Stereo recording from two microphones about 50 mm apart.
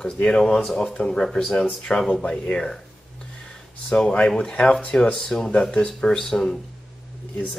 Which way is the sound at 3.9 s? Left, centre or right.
Centre.